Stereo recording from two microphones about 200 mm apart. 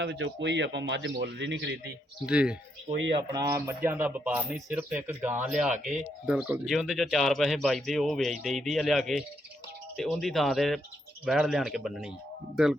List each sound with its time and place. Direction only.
0.0 s speech: 60° right (ahead or behind)
2.2 s speech: 5° right (ahead or behind)